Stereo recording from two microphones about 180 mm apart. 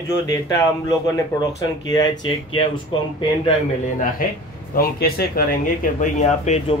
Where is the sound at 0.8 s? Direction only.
20° left (ahead or behind).